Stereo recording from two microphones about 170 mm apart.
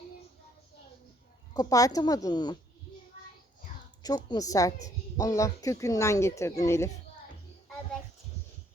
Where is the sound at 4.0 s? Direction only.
20° left (ahead or behind).